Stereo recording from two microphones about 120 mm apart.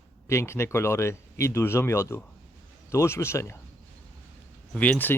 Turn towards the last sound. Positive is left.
turn(degrees=15)  # may be behind; listen again after turning